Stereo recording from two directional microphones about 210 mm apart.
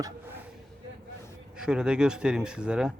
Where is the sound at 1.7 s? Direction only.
5° right (ahead or behind).